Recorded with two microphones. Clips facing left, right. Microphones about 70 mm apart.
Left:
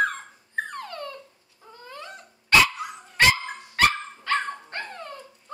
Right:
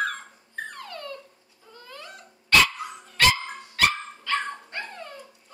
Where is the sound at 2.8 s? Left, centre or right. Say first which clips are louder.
Left 1 dB; centre.